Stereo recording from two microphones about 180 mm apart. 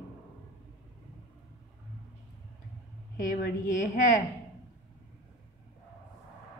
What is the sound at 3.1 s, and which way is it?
A woman's voice, 50° left (ahead or behind).